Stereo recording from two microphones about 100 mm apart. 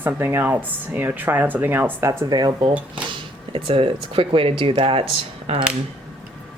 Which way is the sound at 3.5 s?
75° right (ahead or behind).